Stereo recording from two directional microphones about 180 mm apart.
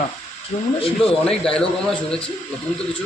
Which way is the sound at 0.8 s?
30° left (ahead or behind).